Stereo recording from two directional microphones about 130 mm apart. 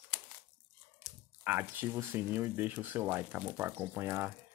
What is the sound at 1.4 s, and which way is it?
Speech, 15° right (ahead or behind).